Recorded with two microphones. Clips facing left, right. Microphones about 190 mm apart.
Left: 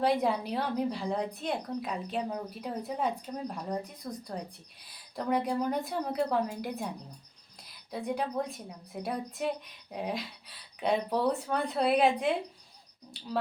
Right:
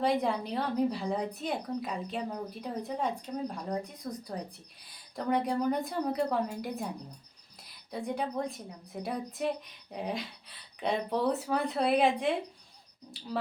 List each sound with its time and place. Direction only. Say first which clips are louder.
0.0 s a woman's voice: left 1 dB; centre (ahead or behind)